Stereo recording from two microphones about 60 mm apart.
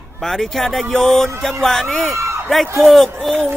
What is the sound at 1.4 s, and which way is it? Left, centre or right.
Speech, centre.